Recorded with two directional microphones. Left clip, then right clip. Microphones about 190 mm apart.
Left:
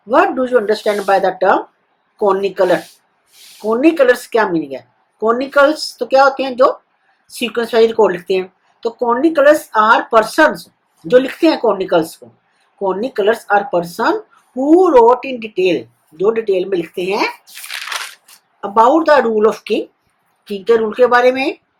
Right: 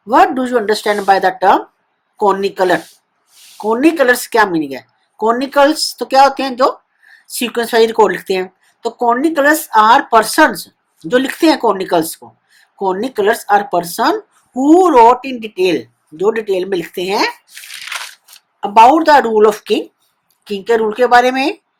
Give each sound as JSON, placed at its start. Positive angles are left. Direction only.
{"t": 0.1, "sound": "speech", "side_deg": -60}
{"t": 19.0, "sound": "speech", "side_deg": -60}